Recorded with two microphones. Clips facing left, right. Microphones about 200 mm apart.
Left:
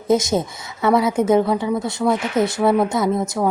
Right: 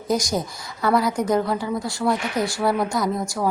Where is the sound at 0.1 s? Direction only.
25° left (ahead or behind).